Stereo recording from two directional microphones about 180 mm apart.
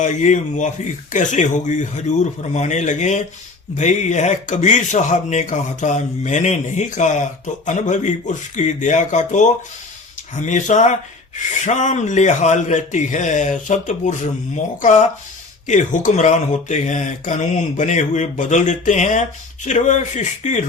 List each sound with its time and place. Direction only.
0.0 s speech: 45° left (ahead or behind)